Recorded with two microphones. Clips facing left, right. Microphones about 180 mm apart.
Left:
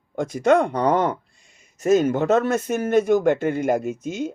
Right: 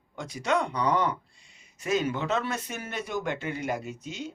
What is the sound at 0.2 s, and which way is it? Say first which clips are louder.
Speech: left 10 dB; 50° left (ahead or behind).